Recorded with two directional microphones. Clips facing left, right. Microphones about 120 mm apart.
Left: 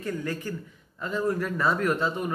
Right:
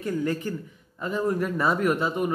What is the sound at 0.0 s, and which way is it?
A man's voice, 25° right (ahead or behind).